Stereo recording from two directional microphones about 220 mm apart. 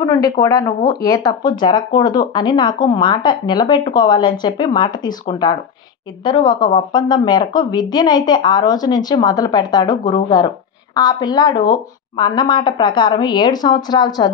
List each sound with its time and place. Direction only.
0.0 s speech: 15° left (ahead or behind)